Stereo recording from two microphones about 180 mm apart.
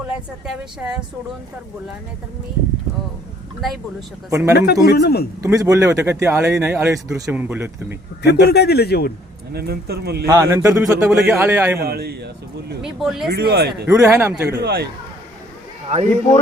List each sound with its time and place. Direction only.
0.1 s a woman's voice: 5° right (ahead or behind)
4.3 s speech: 15° right (ahead or behind)
4.5 s a man's voice: 60° left (ahead or behind)
5.4 s speech: 15° right (ahead or behind)
8.2 s a man's voice: 65° left (ahead or behind)
9.5 s speech: 60° right (ahead or behind)
10.2 s speech: 20° right (ahead or behind)
11.8 s speech: 60° right (ahead or behind)
12.8 s a woman's voice: 5° right (ahead or behind)
13.3 s speech: 60° right (ahead or behind)
13.8 s speech: 15° right (ahead or behind)
14.6 s speech: 60° right (ahead or behind)